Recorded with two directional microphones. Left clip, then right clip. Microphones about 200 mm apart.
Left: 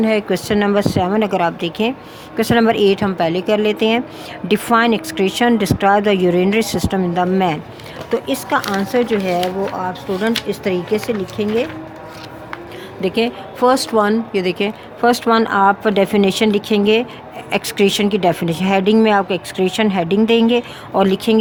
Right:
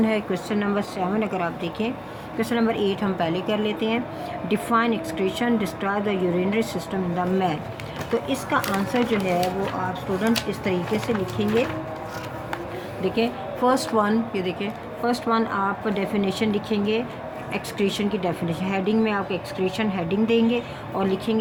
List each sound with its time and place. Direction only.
0.0 s speech: 40° left (ahead or behind)
13.0 s speech: 50° left (ahead or behind)